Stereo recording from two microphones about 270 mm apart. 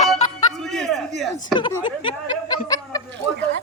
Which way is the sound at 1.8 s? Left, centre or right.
Centre.